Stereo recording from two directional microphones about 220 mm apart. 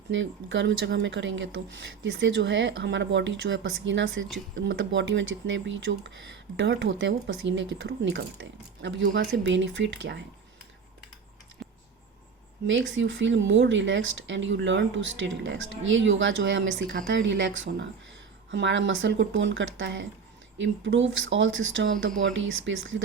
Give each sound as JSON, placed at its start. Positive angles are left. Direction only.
{"t": 0.1, "sound": "speech", "side_deg": -55}
{"t": 11.6, "sound": "typing", "side_deg": 0}
{"t": 12.6, "sound": "speech", "side_deg": -60}